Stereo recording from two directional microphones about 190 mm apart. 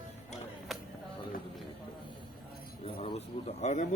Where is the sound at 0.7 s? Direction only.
Centre (ahead or behind).